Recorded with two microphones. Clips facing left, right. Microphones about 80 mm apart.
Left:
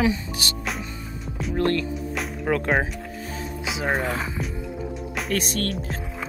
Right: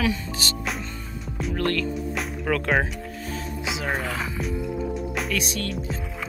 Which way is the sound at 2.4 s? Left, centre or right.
Centre.